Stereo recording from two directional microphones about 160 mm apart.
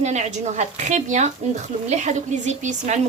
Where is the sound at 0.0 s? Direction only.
45° right (ahead or behind).